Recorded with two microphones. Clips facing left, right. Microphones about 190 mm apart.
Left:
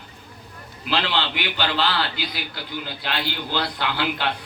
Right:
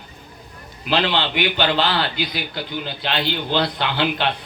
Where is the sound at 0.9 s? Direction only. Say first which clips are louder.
Right 4 dB; 20° right (ahead or behind).